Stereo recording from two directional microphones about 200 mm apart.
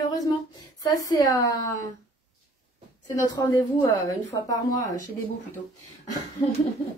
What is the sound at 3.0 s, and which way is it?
A woman's voice, 15° left (ahead or behind).